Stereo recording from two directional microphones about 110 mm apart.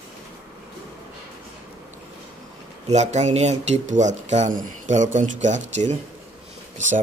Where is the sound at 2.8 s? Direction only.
90° right.